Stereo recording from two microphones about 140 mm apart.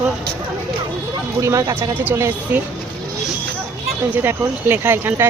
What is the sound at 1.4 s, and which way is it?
Speech, 20° right (ahead or behind).